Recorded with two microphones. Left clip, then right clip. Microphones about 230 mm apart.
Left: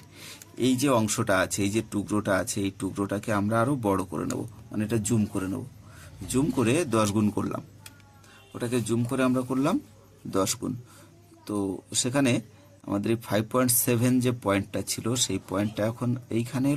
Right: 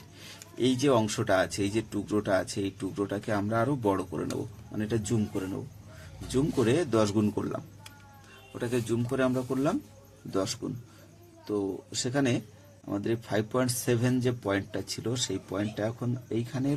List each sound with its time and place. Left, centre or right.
0.6 s speech: left